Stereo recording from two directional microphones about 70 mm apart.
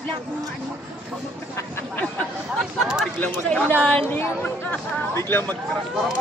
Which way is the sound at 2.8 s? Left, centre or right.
Centre.